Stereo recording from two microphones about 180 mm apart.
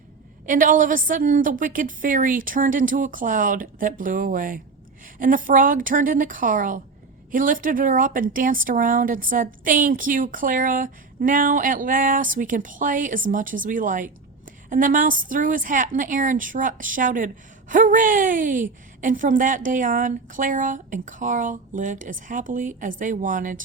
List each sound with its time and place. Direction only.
0.4 s a woman's voice: 45° right (ahead or behind)